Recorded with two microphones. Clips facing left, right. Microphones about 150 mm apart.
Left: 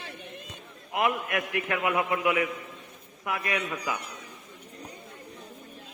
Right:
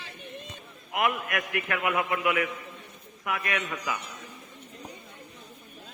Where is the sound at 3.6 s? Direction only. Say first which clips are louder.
Left 1 dB; 10° left (ahead or behind).